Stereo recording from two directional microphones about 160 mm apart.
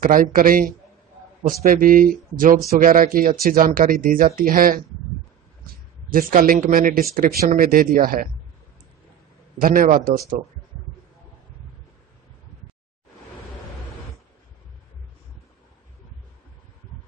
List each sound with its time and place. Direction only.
0.0 s speech: 60° right (ahead or behind)
6.0 s speech: 60° right (ahead or behind)
9.6 s speech: 60° right (ahead or behind)